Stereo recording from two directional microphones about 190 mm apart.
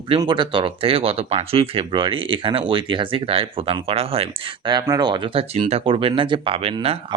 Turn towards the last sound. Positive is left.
turn(degrees=-30)  # may be behind; listen again after turning